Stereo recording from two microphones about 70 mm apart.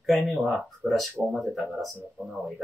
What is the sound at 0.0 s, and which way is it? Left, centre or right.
Speech, centre.